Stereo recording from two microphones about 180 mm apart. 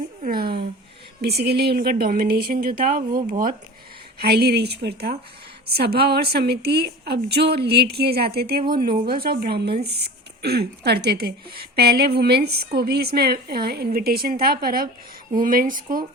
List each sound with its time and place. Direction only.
0.3 s a sound: 55° right (ahead or behind)
1.2 s a woman's voice: 65° right (ahead or behind)
4.2 s a woman's voice: 65° right (ahead or behind); by 16.0 s 50° right (ahead or behind)